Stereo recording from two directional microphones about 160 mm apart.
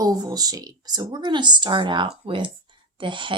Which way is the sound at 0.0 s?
25° right (ahead or behind).